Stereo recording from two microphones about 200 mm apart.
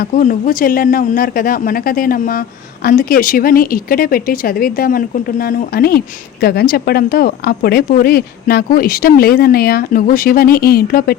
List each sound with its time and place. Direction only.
0.0 s speech: 45° left (ahead or behind)